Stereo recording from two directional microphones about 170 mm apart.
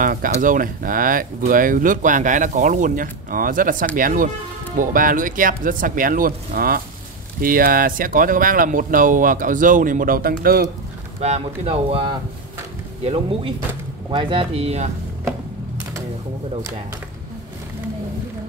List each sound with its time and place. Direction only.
0.0 s speech: 55° right (ahead or behind)
11.1 s speech: 40° right (ahead or behind)